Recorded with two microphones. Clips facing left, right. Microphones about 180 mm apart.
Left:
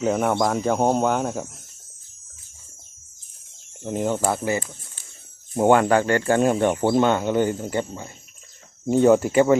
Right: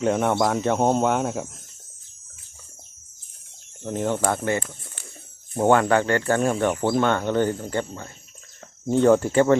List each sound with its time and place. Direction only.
0.0 s speech: centre (ahead or behind)
3.8 s speech: 10° left (ahead or behind)